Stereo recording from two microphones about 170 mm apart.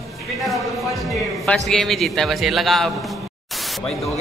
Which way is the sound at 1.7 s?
Centre (ahead or behind).